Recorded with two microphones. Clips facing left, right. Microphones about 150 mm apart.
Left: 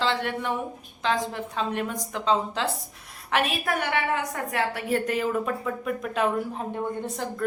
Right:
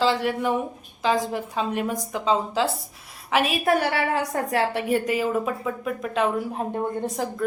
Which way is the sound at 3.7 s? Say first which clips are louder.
Right 4 dB; 35° right (ahead or behind).